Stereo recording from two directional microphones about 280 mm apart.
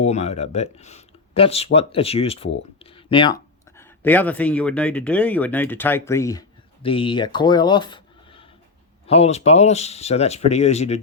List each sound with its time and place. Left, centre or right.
0.0 s speech: left